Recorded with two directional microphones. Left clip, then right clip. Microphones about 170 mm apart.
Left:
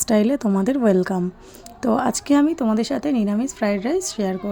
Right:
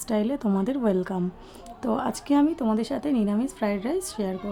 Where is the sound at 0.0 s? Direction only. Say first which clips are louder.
Left 7 dB; 20° left (ahead or behind).